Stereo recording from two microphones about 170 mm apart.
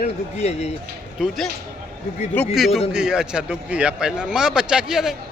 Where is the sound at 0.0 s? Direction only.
40° left (ahead or behind).